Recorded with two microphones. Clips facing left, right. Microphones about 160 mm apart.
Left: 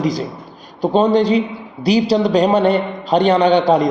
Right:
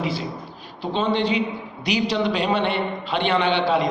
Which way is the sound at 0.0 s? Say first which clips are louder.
Left 7 dB; 40° left (ahead or behind).